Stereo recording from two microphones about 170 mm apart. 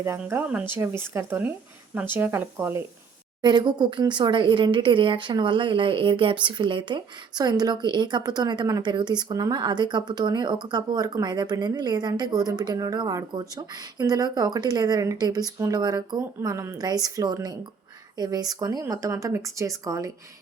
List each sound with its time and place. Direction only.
0.0 s speech: 15° right (ahead or behind)
3.4 s speech: 25° right (ahead or behind)